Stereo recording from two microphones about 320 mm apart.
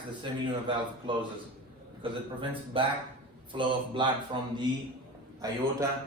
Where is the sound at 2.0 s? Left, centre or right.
Centre.